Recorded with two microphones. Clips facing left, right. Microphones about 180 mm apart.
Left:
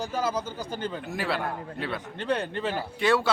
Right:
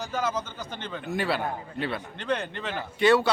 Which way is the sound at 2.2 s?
30° left (ahead or behind).